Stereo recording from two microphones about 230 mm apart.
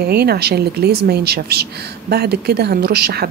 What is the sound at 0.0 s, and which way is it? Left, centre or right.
Speech, right.